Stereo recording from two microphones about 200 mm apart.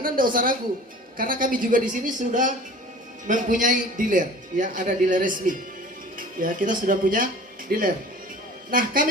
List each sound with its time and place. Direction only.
0.0 s a woman's voice: 45° right (ahead or behind)